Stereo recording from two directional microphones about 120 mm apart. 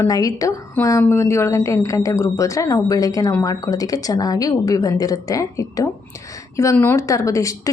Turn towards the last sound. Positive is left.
turn(degrees=25)  # may be behind; listen again after turning